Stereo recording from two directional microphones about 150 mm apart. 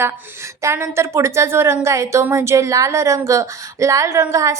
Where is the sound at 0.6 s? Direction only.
15° right (ahead or behind).